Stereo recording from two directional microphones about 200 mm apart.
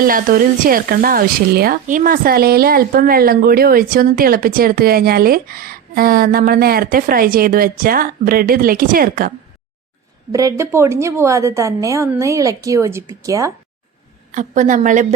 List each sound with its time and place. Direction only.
0.0 s speech: 45° right (ahead or behind)
10.3 s a woman's voice: 15° right (ahead or behind)
14.3 s a woman's voice: 35° right (ahead or behind)